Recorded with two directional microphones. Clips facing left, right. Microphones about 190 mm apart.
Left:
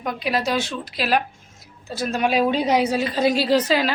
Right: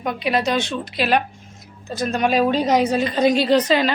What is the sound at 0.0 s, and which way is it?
Speech, centre (ahead or behind).